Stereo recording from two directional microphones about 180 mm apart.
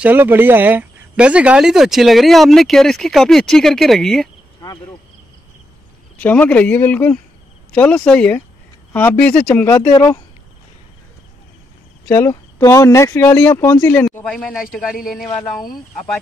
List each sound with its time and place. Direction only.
0.0 s speech: 10° right (ahead or behind)
6.1 s speech: 10° left (ahead or behind)
9.9 s speech: 20° left (ahead or behind)
12.1 s speech: 15° left (ahead or behind); by 15.0 s centre (ahead or behind)